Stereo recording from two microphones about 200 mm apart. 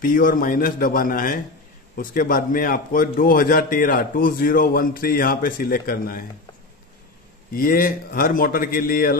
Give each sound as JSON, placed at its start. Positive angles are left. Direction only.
{"t": 0.0, "sound": "a man's voice", "side_deg": 45}
{"t": 7.5, "sound": "a man's voice", "side_deg": 45}